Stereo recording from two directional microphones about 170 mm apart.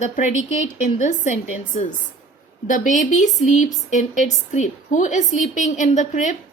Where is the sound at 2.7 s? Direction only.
50° left (ahead or behind).